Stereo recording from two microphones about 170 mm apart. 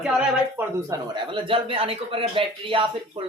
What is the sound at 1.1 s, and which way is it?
A man's voice, 30° right (ahead or behind).